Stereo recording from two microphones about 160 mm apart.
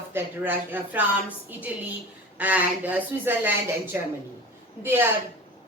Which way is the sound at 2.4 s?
10° right (ahead or behind).